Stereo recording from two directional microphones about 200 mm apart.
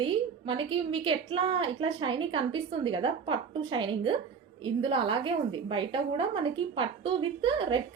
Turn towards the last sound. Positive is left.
turn(degrees=-25)  # may be behind; listen again after turning